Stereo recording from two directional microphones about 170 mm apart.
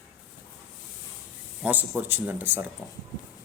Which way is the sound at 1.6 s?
10° right (ahead or behind).